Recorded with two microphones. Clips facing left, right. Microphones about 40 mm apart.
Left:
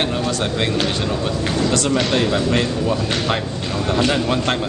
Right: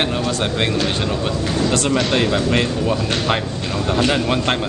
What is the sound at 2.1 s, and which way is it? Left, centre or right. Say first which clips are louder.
Speech: right 1 dB; centre.